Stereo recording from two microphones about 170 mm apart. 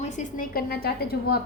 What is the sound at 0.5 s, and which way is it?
Speech, 65° left (ahead or behind).